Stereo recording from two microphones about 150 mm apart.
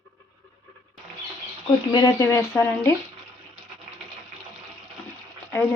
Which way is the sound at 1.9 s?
20° left (ahead or behind).